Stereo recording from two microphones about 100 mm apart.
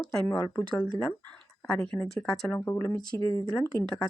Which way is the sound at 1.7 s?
10° left (ahead or behind).